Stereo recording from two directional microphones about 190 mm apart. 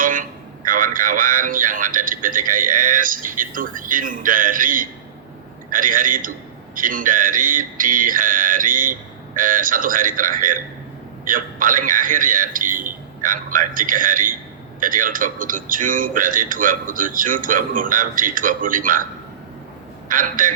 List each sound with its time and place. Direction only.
0.0 s a man's voice: 45° right (ahead or behind)
20.1 s a man's voice: 45° right (ahead or behind)